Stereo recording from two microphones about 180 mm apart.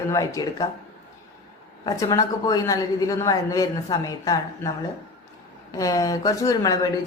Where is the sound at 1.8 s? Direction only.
20° left (ahead or behind).